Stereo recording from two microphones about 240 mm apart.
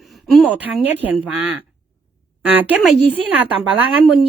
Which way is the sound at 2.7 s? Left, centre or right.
Centre.